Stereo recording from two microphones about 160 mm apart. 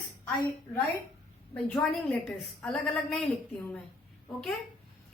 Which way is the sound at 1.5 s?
5° left (ahead or behind).